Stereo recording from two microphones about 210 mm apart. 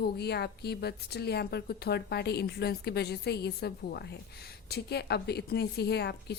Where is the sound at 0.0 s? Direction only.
50° left (ahead or behind).